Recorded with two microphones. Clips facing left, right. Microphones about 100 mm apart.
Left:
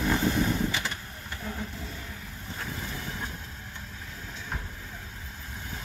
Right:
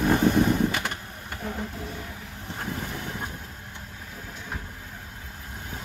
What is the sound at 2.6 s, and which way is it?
Boat, 60° right (ahead or behind).